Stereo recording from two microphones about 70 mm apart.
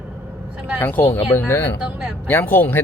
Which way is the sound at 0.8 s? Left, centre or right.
Left.